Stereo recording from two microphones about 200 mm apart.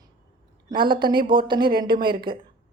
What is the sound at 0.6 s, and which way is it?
Speech, 25° right (ahead or behind).